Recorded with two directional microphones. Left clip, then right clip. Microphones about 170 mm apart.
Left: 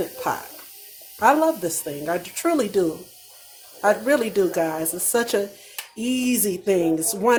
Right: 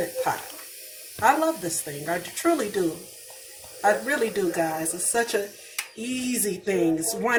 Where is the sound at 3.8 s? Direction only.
55° left (ahead or behind).